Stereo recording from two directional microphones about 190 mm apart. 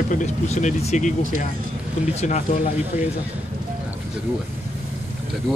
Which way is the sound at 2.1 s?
40° left (ahead or behind).